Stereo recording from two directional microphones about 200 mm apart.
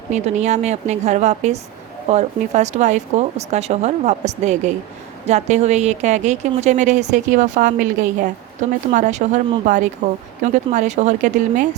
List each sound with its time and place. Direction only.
0.1 s speech: 35° right (ahead or behind)